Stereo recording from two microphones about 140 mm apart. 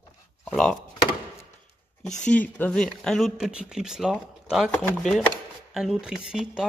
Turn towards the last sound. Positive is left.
turn(degrees=-5)  # may be behind; listen again after turning